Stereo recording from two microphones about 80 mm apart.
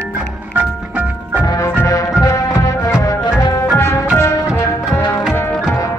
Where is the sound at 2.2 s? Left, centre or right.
Left.